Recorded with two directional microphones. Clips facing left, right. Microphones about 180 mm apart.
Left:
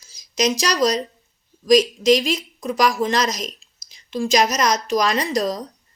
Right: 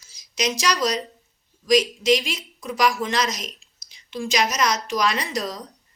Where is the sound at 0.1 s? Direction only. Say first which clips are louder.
Left 5 dB; 40° left (ahead or behind).